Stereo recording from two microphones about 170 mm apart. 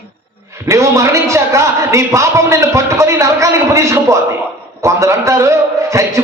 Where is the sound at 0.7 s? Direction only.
15° right (ahead or behind).